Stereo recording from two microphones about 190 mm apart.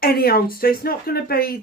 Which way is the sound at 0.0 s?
50° left (ahead or behind).